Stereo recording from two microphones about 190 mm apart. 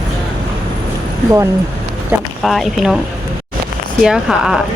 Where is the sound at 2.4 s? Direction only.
Centre (ahead or behind).